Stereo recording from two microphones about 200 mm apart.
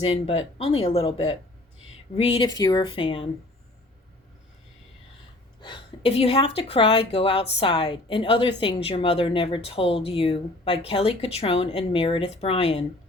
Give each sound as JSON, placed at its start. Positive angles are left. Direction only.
{"t": 0.0, "sound": "speech", "side_deg": 30}
{"t": 5.5, "sound": "speech", "side_deg": 25}